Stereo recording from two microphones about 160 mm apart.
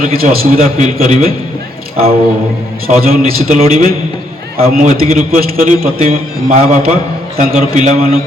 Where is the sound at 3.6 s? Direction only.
50° right (ahead or behind).